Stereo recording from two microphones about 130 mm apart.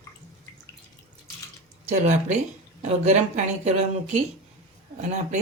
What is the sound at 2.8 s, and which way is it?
Speech, 70° right (ahead or behind).